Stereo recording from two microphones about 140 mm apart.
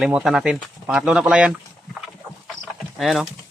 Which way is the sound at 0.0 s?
5° right (ahead or behind).